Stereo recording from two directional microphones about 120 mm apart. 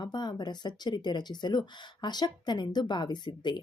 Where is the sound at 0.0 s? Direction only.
35° left (ahead or behind).